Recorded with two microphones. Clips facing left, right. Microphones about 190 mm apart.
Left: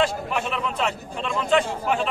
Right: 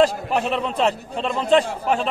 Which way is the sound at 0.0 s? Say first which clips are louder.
Right 5 dB; 35° right (ahead or behind).